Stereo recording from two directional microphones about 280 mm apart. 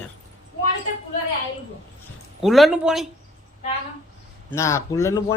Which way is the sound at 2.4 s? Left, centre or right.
Centre.